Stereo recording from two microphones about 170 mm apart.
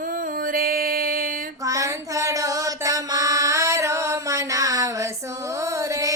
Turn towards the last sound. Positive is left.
turn(degrees=-20)  # may be behind; listen again after turning